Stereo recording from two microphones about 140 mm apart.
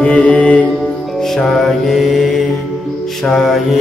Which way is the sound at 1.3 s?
Centre (ahead or behind).